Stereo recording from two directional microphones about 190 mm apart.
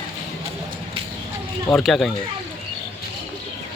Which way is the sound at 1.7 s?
Centre (ahead or behind).